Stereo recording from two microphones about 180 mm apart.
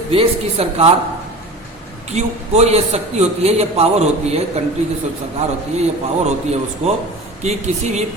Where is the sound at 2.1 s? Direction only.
40° right (ahead or behind).